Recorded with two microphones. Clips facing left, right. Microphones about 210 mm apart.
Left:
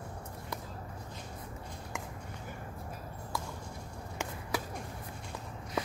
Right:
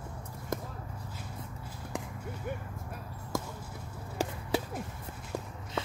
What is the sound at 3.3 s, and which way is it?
Basketball bounce, 45° right (ahead or behind).